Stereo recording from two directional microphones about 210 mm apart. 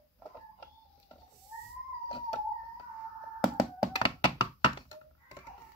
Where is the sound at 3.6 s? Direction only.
25° left (ahead or behind).